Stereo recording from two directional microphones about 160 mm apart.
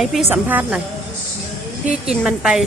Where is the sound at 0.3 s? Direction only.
10° right (ahead or behind).